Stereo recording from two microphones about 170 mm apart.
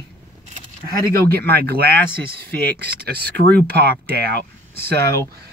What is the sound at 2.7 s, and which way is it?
Speech, 70° right (ahead or behind).